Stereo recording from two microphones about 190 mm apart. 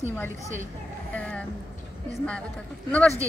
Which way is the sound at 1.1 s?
5° left (ahead or behind).